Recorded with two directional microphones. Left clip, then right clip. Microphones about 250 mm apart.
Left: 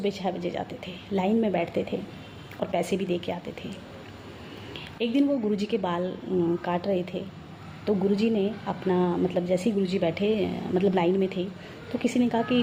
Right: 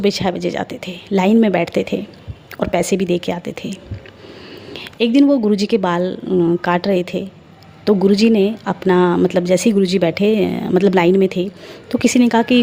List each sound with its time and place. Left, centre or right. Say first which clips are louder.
0.0 s a woman's voice: right 11 dB; right